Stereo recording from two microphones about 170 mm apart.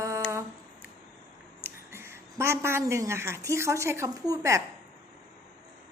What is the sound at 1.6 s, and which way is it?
A woman's voice, 15° right (ahead or behind).